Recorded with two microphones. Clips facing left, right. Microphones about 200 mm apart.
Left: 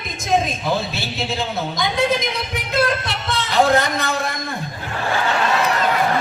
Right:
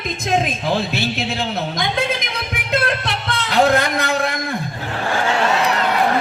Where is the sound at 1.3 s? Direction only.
60° right (ahead or behind).